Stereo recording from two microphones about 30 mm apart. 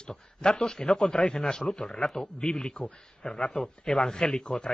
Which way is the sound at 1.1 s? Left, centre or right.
Left.